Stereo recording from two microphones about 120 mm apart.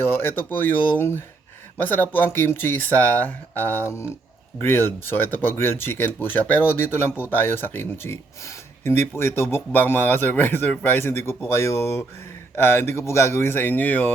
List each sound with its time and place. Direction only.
0.0 s speech: 20° left (ahead or behind)